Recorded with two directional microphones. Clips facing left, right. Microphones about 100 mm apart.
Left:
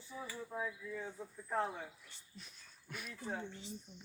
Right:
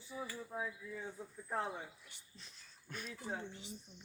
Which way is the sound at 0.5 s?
15° right (ahead or behind).